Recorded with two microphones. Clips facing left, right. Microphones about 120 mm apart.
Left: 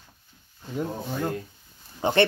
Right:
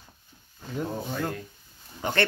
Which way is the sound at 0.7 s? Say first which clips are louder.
Left 1 dB; 5° left (ahead or behind).